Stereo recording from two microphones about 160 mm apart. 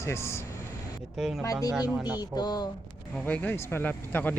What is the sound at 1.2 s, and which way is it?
Speech, 5° right (ahead or behind).